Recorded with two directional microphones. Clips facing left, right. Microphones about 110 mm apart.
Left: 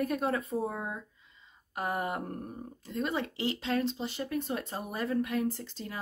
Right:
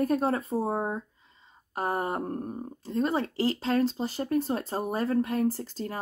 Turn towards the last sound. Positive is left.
turn(degrees=-40)  # may be behind; listen again after turning